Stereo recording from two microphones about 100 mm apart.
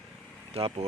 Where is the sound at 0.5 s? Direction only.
70° right (ahead or behind).